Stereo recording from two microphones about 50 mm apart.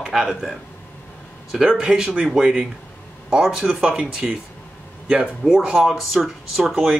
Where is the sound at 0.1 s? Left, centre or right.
Centre.